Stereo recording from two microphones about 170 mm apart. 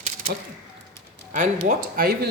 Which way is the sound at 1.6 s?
60° right (ahead or behind).